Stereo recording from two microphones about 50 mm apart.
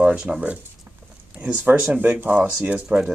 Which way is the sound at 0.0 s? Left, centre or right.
Right.